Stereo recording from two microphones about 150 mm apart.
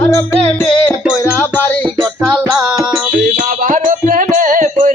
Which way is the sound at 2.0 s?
Centre (ahead or behind).